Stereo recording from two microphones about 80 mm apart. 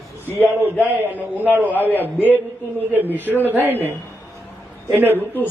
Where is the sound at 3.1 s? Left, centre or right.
Right.